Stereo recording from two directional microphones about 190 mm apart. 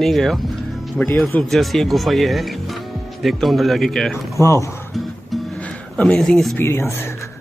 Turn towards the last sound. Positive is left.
turn(degrees=15)  # may be behind; listen again after turning